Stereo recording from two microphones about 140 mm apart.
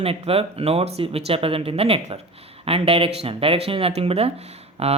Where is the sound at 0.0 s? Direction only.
45° right (ahead or behind).